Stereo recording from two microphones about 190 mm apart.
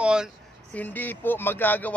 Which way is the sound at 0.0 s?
5° right (ahead or behind).